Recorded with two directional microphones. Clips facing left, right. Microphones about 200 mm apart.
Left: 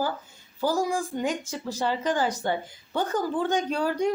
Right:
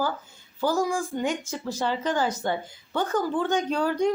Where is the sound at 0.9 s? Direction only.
35° left (ahead or behind).